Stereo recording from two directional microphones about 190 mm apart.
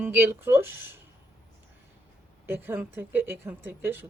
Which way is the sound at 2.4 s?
10° right (ahead or behind).